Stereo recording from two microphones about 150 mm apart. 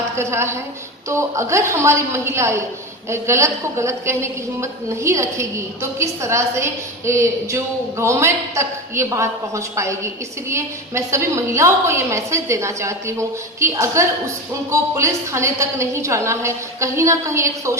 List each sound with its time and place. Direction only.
0.2 s a woman's voice: 20° right (ahead or behind)